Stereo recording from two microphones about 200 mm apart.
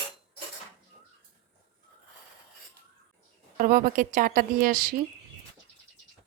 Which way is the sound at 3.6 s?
45° right (ahead or behind).